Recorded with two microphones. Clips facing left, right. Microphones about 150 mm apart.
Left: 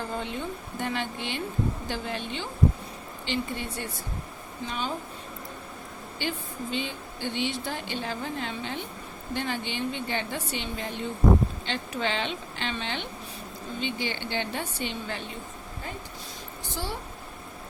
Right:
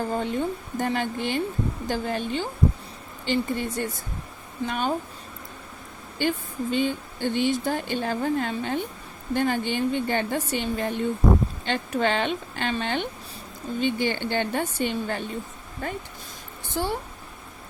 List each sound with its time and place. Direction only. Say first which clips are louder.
0.1 s a woman's voice: right 6 dB; 45° right (ahead or behind)
6.1 s speech: right 7 dB; 50° right (ahead or behind)
16.8 s a woman's voice: right 8 dB; 60° right (ahead or behind)